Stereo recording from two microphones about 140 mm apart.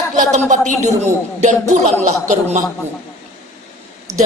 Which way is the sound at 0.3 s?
60° right (ahead or behind).